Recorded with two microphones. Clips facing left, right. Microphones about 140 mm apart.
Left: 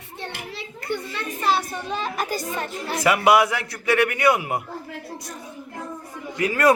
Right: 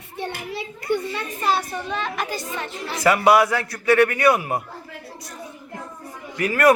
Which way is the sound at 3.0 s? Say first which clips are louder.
Right 1 dB; 15° left (ahead or behind).